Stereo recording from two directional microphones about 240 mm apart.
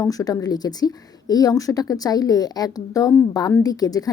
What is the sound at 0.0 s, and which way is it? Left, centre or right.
Speech, centre.